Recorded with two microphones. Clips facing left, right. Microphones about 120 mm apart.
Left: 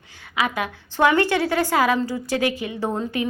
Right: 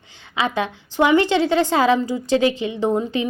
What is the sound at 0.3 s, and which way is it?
A woman's voice, 25° right (ahead or behind).